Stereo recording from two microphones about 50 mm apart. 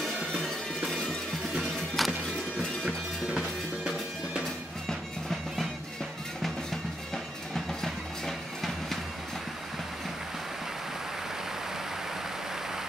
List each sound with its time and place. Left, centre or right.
0.3 s music: centre
3.3 s drum: centre
4.8 s music: centre
7.5 s music: centre